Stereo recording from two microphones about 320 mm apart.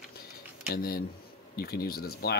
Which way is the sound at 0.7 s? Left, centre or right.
Left.